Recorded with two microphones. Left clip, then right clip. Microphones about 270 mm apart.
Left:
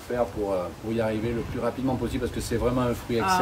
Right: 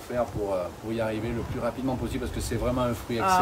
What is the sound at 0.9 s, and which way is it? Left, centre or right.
Speech, centre.